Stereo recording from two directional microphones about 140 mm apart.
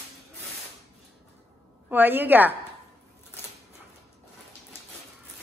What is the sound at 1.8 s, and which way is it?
Speech, 15° right (ahead or behind).